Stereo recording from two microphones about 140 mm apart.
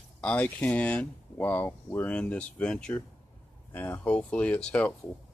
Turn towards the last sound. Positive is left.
turn(degrees=5)  # may be behind; listen again after turning